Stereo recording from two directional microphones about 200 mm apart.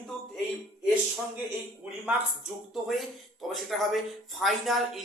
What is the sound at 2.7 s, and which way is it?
Speech, centre (ahead or behind).